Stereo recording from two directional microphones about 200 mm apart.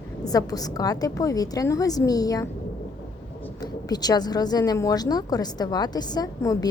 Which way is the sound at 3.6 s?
20° left (ahead or behind).